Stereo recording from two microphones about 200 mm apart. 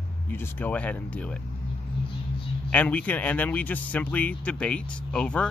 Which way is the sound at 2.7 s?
5° left (ahead or behind).